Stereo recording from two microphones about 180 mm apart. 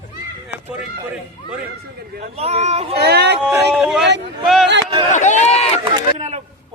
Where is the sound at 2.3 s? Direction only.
35° right (ahead or behind).